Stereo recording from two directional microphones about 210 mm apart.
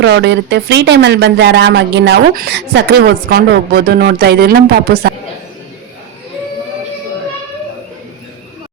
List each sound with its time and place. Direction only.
0.0 s speech: 55° right (ahead or behind)